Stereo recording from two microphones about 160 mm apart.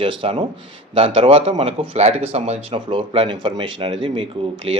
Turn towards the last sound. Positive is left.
turn(degrees=-40)  # may be behind; listen again after turning